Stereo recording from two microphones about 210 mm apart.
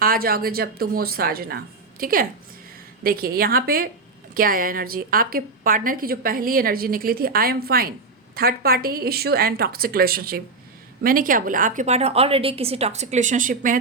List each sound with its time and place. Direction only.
0.0 s a woman's voice: 45° right (ahead or behind)